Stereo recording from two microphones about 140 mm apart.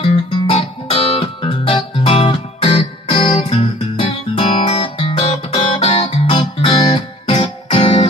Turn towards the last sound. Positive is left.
turn(degrees=40)  # may be behind; listen again after turning